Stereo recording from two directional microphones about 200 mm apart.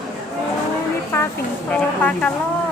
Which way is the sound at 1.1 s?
10° left (ahead or behind).